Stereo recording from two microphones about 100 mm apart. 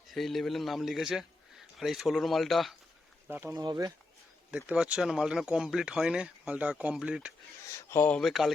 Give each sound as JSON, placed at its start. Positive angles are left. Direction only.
{"t": 0.1, "sound": "a man's voice", "side_deg": 0}
{"t": 3.2, "sound": "speech", "side_deg": -20}
{"t": 3.5, "sound": "speech", "side_deg": -40}
{"t": 4.5, "sound": "speech", "side_deg": -10}
{"t": 7.8, "sound": "speech", "side_deg": 30}
{"t": 8.1, "sound": "a man's voice", "side_deg": 0}